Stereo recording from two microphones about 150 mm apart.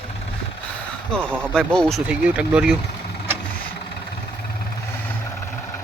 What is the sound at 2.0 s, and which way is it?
Speech, 10° right (ahead or behind).